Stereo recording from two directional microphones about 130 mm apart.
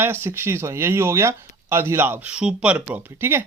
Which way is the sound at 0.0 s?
15° right (ahead or behind).